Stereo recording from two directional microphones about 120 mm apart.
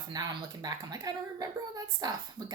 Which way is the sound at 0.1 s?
35° right (ahead or behind).